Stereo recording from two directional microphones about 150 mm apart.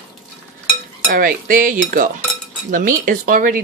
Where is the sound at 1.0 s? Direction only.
70° right (ahead or behind).